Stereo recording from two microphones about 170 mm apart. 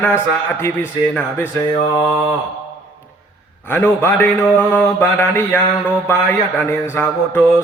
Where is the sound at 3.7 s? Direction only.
10° left (ahead or behind).